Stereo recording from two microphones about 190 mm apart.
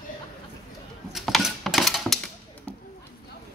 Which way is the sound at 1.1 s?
Centre (ahead or behind).